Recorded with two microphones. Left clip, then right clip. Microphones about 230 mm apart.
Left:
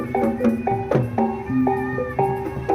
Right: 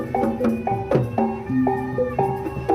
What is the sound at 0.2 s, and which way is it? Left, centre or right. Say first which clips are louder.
Music: left 2 dB; right.